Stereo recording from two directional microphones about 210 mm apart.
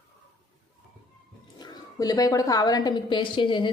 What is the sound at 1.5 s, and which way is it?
A woman's voice, 15° left (ahead or behind).